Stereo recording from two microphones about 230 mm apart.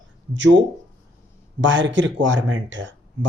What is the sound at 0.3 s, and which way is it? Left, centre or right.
Speech, right.